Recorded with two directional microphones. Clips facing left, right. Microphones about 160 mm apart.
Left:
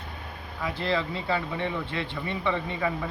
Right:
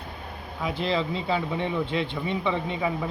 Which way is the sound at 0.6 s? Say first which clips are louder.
Right 2 dB; 15° right (ahead or behind).